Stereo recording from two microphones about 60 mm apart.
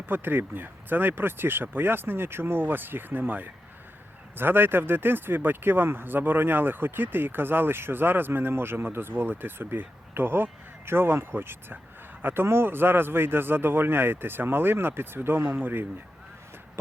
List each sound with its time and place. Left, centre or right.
0.0 s speech: right